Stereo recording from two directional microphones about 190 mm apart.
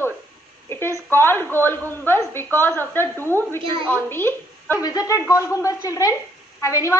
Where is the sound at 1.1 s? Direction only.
10° left (ahead or behind).